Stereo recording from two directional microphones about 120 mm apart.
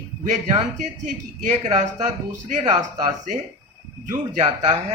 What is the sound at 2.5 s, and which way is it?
Speech, 90° right.